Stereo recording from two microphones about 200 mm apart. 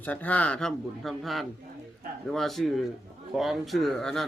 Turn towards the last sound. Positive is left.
turn(degrees=0)  # may be behind; listen again after turning